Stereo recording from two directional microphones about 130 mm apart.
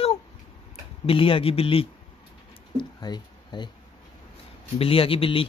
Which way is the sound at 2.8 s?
35° left (ahead or behind).